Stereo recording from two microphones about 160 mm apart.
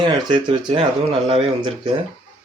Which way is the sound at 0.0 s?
30° right (ahead or behind).